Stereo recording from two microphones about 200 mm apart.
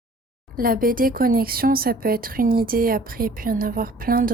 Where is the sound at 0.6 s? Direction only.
45° right (ahead or behind).